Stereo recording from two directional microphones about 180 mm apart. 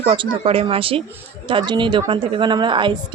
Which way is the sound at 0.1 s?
30° right (ahead or behind).